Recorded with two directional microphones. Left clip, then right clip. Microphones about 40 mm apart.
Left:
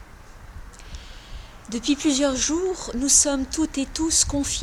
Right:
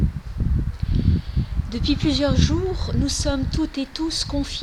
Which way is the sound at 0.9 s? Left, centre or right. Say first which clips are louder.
Right 16 dB; centre.